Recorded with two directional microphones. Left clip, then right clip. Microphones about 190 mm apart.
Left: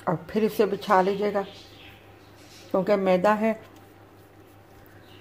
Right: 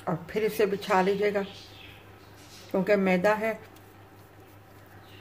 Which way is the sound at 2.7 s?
20° left (ahead or behind).